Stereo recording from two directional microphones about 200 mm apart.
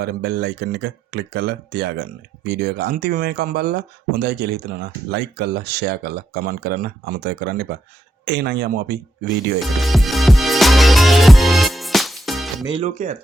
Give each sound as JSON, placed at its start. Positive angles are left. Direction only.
{"t": 0.0, "sound": "speech", "side_deg": -55}
{"t": 9.6, "sound": "music", "side_deg": 0}
{"t": 12.7, "sound": "speech", "side_deg": -35}